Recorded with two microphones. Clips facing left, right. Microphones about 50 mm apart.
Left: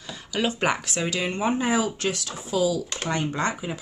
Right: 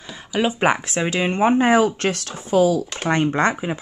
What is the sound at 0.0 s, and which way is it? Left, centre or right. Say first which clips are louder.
Speech: right 5 dB; right.